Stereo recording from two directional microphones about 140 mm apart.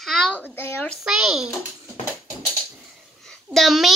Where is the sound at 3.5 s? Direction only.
Centre (ahead or behind).